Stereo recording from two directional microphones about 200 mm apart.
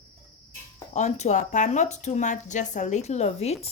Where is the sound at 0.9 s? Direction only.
35° left (ahead or behind).